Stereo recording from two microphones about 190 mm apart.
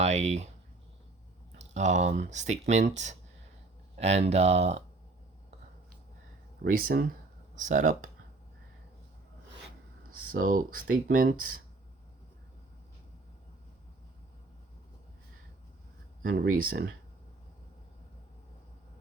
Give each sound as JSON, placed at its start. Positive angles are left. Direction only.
{"t": 0.0, "sound": "speech", "side_deg": -35}
{"t": 1.5, "sound": "speech", "side_deg": -40}
{"t": 6.7, "sound": "speech", "side_deg": -50}
{"t": 10.1, "sound": "a sound", "side_deg": -50}
{"t": 10.4, "sound": "speech", "side_deg": -45}
{"t": 16.3, "sound": "speech", "side_deg": -55}